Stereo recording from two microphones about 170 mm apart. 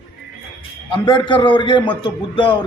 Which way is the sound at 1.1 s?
30° left (ahead or behind).